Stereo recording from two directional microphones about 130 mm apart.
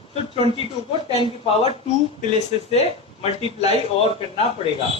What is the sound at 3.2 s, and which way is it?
Speech, 50° left (ahead or behind).